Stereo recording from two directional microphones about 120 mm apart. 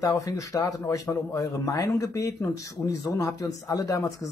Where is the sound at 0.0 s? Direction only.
30° left (ahead or behind).